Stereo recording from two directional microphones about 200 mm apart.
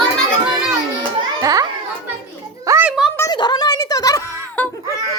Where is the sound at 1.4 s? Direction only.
15° right (ahead or behind).